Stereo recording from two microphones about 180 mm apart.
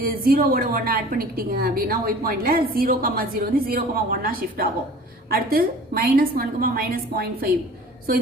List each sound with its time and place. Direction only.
0.0 s a woman's voice: 55° right (ahead or behind)